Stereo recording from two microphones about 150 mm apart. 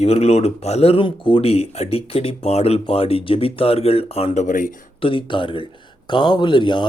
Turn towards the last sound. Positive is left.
turn(degrees=30)  # may be behind; listen again after turning